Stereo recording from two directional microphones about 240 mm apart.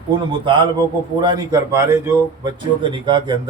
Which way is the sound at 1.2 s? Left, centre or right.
Centre.